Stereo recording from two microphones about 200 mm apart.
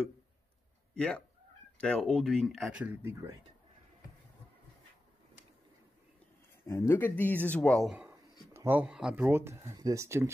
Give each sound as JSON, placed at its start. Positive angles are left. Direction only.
{"t": 0.9, "sound": "speech", "side_deg": 5}
{"t": 6.6, "sound": "speech", "side_deg": 15}